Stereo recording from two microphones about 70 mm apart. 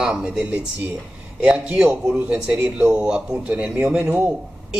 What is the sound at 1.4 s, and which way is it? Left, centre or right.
Speech, centre.